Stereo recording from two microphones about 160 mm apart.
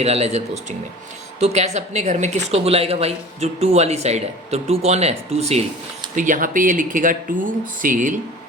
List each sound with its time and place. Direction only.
0.0 s speech: 40° right (ahead or behind)
6.1 s speech: 55° right (ahead or behind)